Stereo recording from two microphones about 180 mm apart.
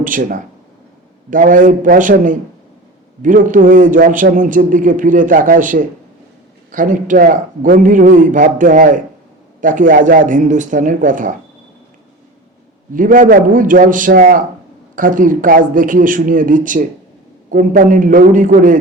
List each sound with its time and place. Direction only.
0.0 s a man's voice: 50° right (ahead or behind)
12.9 s a man's voice: 50° right (ahead or behind)